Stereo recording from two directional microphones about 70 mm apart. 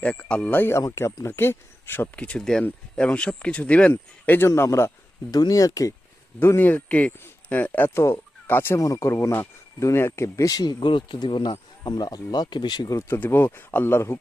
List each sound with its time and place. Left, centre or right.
0.0 s speech: centre
0.7 s speech: left
2.1 s speech: centre
4.3 s speech: left
5.3 s speech: left
6.4 s speech: left
7.9 s speech: left
8.8 s speech: left
10.2 s speech: left
10.5 s speech: left
12.9 s speech: left
13.1 s speech: left